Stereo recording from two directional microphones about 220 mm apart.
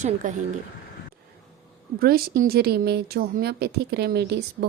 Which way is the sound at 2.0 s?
45° right (ahead or behind).